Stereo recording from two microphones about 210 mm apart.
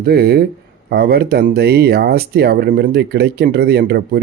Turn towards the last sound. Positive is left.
turn(degrees=-50)  # may be behind; listen again after turning